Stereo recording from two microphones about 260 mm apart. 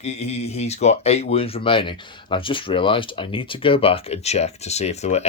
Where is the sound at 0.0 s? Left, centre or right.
Left.